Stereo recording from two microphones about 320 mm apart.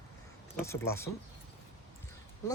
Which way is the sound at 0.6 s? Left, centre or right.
Centre.